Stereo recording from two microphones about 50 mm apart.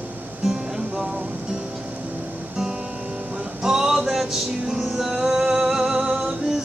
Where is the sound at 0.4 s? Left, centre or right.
Centre.